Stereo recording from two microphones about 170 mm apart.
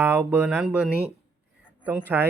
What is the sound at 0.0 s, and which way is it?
Speech, 10° right (ahead or behind).